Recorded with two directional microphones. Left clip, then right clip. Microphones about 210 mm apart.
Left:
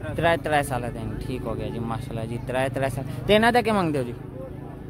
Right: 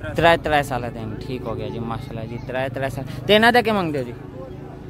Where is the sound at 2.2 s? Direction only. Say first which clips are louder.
Even; 15° left (ahead or behind).